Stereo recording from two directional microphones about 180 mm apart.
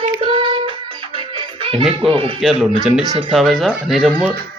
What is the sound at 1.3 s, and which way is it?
Music, 30° right (ahead or behind).